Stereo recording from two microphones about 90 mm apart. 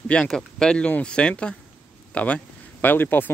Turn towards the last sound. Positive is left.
turn(degrees=20)  # may be behind; listen again after turning